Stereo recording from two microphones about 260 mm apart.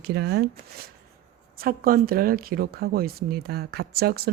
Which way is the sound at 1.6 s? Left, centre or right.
Right.